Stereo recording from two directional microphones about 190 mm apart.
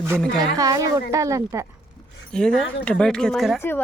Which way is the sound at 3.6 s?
10° left (ahead or behind).